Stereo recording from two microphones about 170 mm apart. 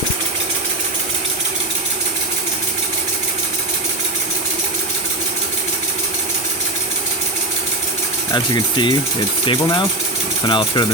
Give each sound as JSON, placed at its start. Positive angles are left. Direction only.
{"t": 8.3, "sound": "speech", "side_deg": 25}